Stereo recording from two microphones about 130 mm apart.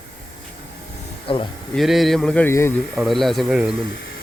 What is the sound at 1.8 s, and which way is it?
Speech, centre (ahead or behind).